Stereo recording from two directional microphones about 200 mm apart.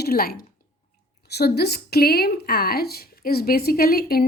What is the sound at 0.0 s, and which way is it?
Speech, 50° left (ahead or behind).